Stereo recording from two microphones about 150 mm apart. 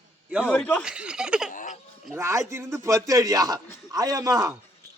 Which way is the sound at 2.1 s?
20° right (ahead or behind).